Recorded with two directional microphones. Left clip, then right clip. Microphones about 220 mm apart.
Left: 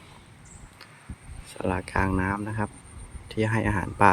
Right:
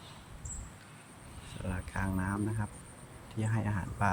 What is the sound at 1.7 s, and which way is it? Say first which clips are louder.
Speech: left 12 dB; 25° left (ahead or behind).